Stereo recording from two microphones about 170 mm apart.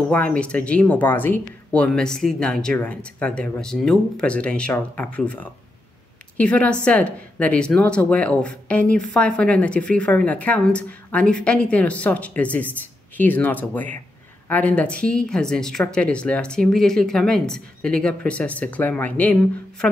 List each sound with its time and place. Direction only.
0.1 s a woman's voice: 10° left (ahead or behind)